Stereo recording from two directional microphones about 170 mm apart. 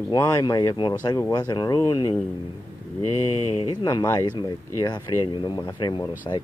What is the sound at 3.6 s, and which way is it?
Speech, 25° left (ahead or behind).